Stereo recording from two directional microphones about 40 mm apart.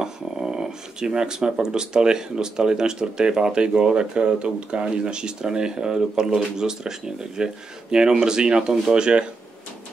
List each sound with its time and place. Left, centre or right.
0.0 s speech: centre